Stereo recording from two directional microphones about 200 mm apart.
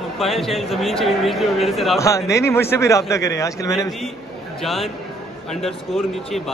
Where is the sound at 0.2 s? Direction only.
Centre (ahead or behind).